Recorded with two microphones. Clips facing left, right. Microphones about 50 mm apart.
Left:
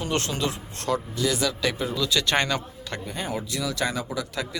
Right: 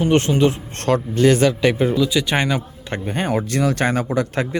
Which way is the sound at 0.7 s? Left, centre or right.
Right.